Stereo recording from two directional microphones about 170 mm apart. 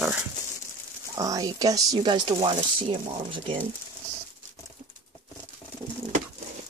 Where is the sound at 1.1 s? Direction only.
20° right (ahead or behind).